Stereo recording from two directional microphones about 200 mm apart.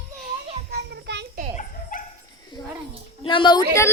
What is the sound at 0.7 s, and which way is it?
Children playing, 60° right (ahead or behind).